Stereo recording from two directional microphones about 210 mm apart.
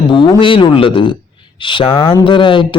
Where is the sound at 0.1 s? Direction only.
25° left (ahead or behind).